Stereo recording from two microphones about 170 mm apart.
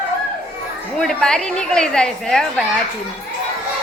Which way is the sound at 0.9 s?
5° left (ahead or behind).